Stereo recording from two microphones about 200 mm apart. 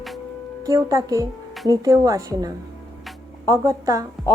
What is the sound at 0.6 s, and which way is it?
Speech, 15° right (ahead or behind).